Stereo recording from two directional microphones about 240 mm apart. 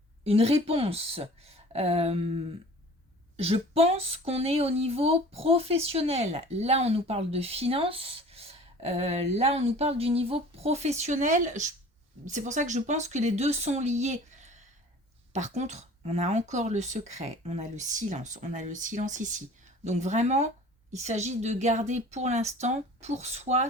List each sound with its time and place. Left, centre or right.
0.3 s speech: right